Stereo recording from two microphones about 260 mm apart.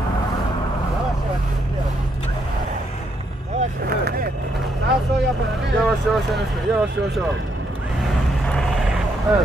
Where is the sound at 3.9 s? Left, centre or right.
Right.